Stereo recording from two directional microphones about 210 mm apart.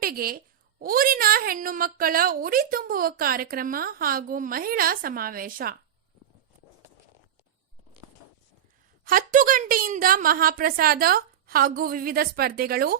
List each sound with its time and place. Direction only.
0.0 s a woman's voice: 45° right (ahead or behind)
9.0 s a woman's voice: 40° right (ahead or behind)